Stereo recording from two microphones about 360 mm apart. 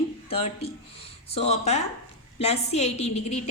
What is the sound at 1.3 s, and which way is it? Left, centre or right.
A woman's voice, centre.